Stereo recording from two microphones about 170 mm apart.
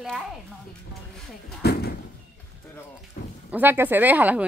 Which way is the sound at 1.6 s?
70° left (ahead or behind).